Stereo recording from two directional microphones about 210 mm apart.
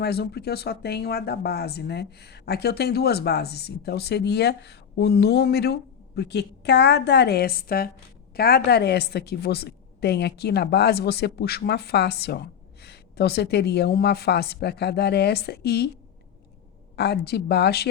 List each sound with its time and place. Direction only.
0.0 s speech: 50° left (ahead or behind)
16.9 s speech: 50° left (ahead or behind)